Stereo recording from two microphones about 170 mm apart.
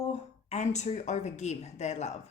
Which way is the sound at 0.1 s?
40° left (ahead or behind).